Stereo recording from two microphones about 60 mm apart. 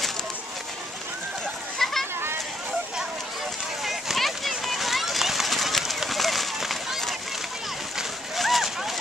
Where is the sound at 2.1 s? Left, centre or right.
Right.